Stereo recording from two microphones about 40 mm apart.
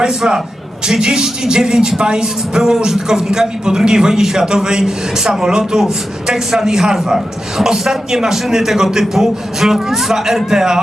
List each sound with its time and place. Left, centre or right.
0.0 s speech: centre